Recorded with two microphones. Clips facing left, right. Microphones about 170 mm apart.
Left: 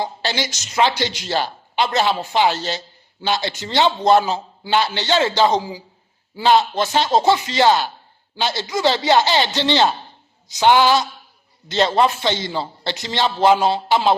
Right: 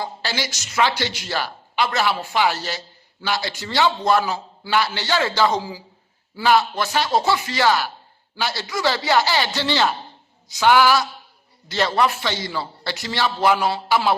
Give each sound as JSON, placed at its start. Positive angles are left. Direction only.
{"t": 0.0, "sound": "a woman's voice", "side_deg": 20}